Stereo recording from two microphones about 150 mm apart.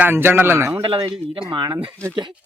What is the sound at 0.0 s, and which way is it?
Speech, 15° right (ahead or behind).